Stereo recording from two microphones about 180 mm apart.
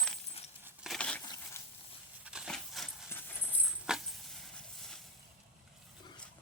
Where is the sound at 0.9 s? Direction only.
5° left (ahead or behind).